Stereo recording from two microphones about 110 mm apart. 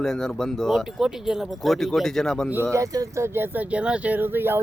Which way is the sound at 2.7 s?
30° right (ahead or behind).